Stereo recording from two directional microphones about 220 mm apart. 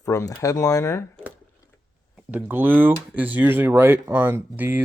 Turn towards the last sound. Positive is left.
turn(degrees=-10)  # may be behind; listen again after turning